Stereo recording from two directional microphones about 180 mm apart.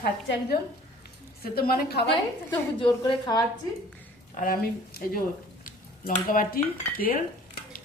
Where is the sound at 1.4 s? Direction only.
55° left (ahead or behind).